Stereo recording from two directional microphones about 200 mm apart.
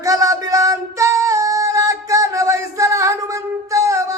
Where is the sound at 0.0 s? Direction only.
15° right (ahead or behind).